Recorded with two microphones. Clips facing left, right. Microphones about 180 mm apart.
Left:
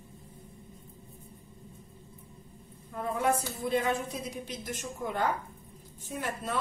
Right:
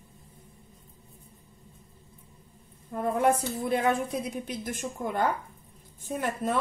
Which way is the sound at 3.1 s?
55° right (ahead or behind).